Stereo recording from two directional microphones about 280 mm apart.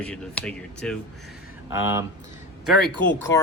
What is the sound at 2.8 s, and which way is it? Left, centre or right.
Speech, left.